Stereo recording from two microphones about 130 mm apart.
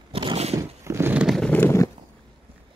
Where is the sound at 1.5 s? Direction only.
20° left (ahead or behind).